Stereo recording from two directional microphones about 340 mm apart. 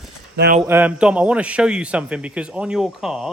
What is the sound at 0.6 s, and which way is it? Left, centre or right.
A man's voice, centre.